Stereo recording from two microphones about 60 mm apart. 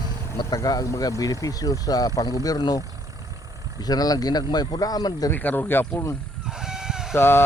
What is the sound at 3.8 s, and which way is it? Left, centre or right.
Speech, left.